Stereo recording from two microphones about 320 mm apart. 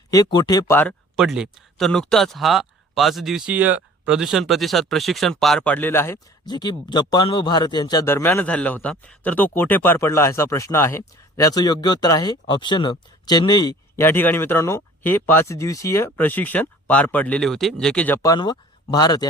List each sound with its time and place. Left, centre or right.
0.1 s speech: centre